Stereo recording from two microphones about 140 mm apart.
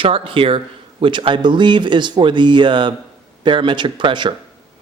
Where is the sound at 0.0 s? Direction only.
40° right (ahead or behind).